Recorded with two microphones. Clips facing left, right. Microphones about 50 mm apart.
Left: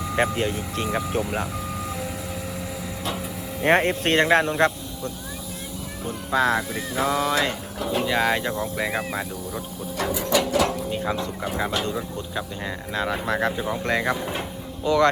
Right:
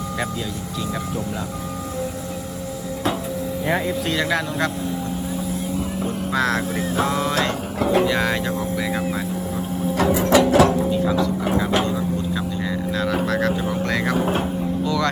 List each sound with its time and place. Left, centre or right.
0.2 s speech: left
3.7 s speech: left
6.3 s speech: centre
8.0 s speech: centre
10.2 s a sound: right
13.0 s speech: centre
14.8 s speech: left